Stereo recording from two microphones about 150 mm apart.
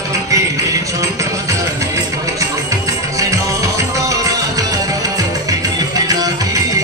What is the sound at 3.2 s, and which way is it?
Music, 20° right (ahead or behind).